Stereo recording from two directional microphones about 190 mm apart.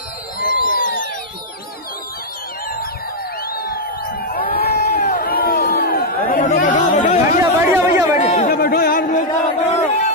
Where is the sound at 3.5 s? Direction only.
50° left (ahead or behind).